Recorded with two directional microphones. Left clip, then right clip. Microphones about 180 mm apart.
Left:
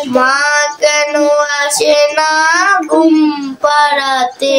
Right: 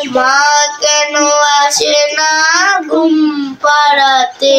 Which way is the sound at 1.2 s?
30° left (ahead or behind).